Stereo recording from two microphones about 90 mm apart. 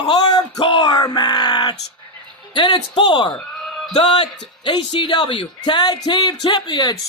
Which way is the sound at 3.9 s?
85° left.